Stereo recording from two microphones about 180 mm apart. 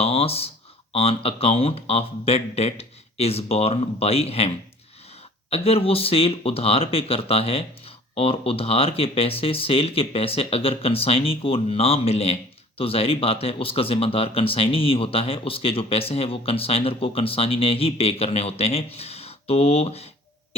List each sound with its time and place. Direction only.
0.0 s speech: 35° left (ahead or behind)